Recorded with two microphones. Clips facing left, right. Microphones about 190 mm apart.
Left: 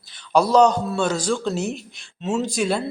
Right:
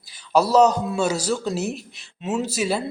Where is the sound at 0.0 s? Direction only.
10° right (ahead or behind).